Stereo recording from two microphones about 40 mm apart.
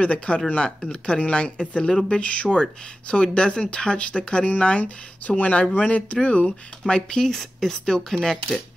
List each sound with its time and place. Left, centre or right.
0.0 s speech: left
0.6 s speech: centre
6.9 s speech: centre